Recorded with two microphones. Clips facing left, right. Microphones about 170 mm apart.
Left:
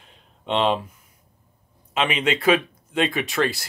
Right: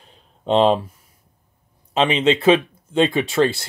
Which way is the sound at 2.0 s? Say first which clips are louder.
Right 6 dB; 30° right (ahead or behind).